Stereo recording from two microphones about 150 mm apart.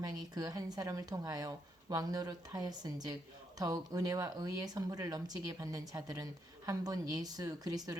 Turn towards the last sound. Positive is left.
turn(degrees=-25)  # may be behind; listen again after turning